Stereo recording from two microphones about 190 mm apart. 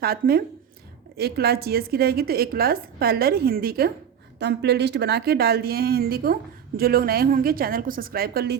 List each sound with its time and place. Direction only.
0.0 s a woman's voice: 55° right (ahead or behind)
4.4 s a woman's voice: 65° right (ahead or behind)